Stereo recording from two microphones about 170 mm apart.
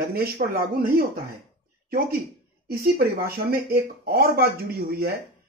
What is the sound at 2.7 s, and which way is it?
Speech, 60° right (ahead or behind).